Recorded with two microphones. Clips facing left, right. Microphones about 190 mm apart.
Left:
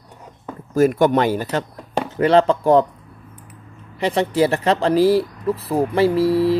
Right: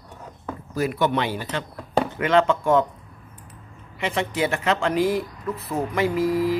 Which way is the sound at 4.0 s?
35° left (ahead or behind).